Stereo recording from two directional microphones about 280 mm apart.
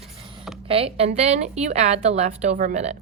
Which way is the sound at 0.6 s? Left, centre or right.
Centre.